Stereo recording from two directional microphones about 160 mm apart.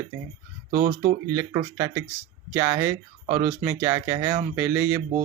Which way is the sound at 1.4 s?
20° right (ahead or behind).